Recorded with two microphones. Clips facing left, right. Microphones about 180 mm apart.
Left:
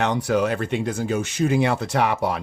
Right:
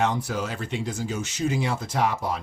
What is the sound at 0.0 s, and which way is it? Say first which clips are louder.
Speech: left 5 dB; 70° left (ahead or behind).